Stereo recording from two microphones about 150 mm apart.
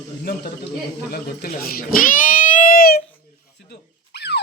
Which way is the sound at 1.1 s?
85° left.